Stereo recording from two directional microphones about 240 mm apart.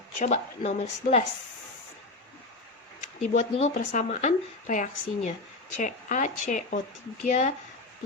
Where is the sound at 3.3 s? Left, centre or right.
Left.